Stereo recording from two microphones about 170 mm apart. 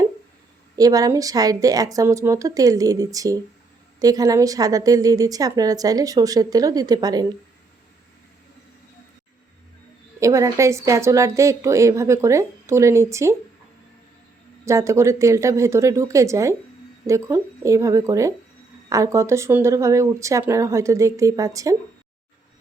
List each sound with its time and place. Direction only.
0.8 s a woman's voice: 20° right (ahead or behind)
10.2 s a woman's voice: 20° right (ahead or behind)
14.6 s a woman's voice: 15° right (ahead or behind)